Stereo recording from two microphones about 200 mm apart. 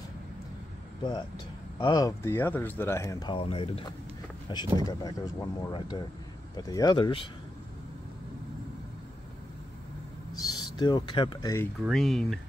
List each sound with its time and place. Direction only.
1.8 s speech: 20° left (ahead or behind)
10.3 s a sound: 20° left (ahead or behind)
10.8 s speech: 20° left (ahead or behind)
11.8 s speech: centre (ahead or behind)